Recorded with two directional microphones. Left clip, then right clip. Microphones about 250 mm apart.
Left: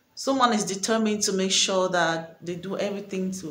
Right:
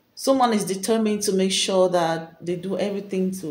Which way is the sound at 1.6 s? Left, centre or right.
Left.